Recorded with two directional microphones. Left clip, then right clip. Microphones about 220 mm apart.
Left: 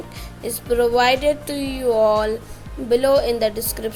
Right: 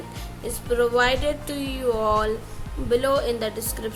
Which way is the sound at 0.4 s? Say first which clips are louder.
Left 4 dB; 15° left (ahead or behind).